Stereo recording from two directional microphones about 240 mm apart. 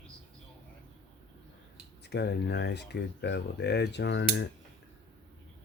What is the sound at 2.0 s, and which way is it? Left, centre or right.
Speech, left.